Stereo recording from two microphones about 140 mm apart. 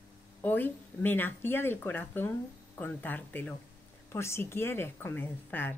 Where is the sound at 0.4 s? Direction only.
15° left (ahead or behind).